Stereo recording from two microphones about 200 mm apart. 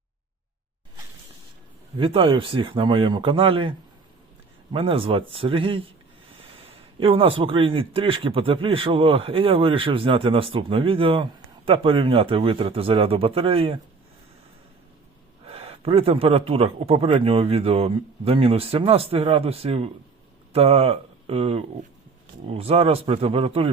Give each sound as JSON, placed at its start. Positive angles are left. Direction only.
{"t": 2.0, "sound": "speech", "side_deg": -25}
{"t": 15.4, "sound": "speech", "side_deg": -30}